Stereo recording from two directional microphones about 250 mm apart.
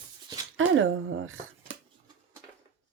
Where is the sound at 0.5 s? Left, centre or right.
Right.